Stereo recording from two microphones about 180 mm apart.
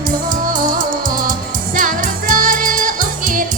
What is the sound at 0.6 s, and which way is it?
Music, 50° right (ahead or behind).